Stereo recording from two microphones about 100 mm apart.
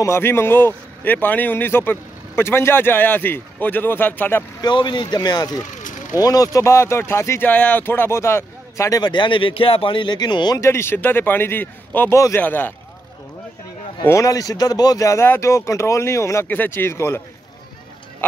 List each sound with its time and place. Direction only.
0.0 s speech: 25° left (ahead or behind)
4.6 s speech: 50° left (ahead or behind); by 9.0 s 30° left (ahead or behind)
9.0 s speech: 50° left (ahead or behind)
10.6 s speech: 25° left (ahead or behind)
14.0 s speech: 30° left (ahead or behind)